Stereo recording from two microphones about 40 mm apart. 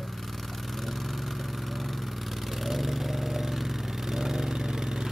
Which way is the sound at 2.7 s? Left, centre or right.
Centre.